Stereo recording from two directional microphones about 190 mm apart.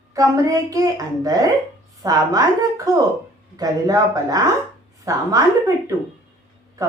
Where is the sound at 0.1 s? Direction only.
15° right (ahead or behind).